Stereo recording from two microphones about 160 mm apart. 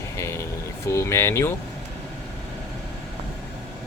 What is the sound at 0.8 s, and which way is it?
Speech, 20° left (ahead or behind).